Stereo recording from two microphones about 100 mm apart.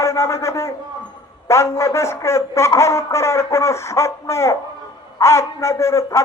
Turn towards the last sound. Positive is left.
turn(degrees=30)  # may be behind; listen again after turning